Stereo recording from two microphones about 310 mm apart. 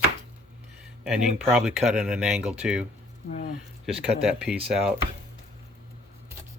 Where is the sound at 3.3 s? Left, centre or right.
Left.